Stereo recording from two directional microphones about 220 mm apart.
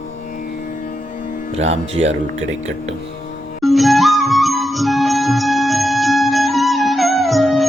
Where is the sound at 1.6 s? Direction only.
30° right (ahead or behind).